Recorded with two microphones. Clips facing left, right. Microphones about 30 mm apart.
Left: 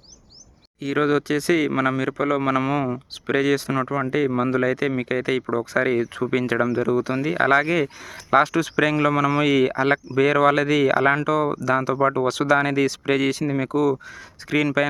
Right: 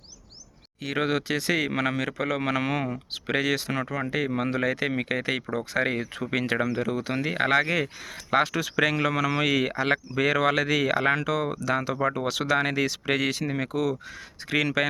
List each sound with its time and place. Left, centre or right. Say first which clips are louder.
0.8 s speech: left 6 dB; right